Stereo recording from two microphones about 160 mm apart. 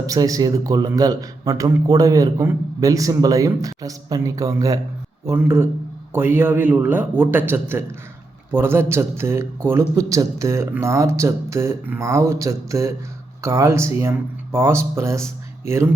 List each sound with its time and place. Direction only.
0.0 s speech: 20° right (ahead or behind)